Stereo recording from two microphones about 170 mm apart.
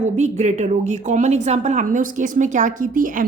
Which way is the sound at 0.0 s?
45° right (ahead or behind).